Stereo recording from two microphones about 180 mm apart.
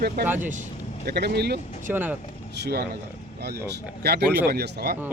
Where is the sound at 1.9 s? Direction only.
10° right (ahead or behind).